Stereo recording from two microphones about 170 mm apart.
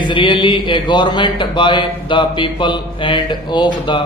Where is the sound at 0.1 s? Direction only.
30° left (ahead or behind).